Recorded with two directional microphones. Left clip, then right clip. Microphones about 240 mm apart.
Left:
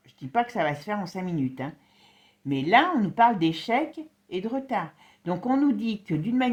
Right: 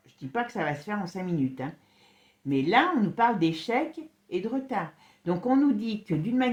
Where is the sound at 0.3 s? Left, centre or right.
Left.